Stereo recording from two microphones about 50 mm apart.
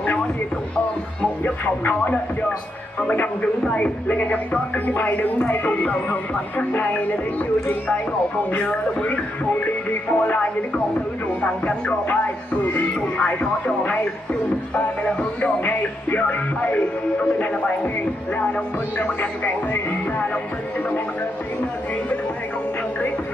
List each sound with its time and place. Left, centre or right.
3.7 s speech: left
4.8 s music: left
8.6 s speech: left
12.7 s music: left
14.8 s music: left
19.4 s music: left